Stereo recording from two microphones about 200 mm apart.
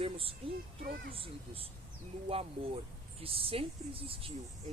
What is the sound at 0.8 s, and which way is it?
Speech, 50° right (ahead or behind).